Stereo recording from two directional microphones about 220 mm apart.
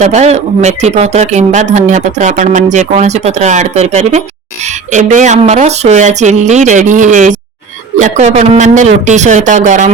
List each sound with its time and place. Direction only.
0.0 s speech: 30° right (ahead or behind)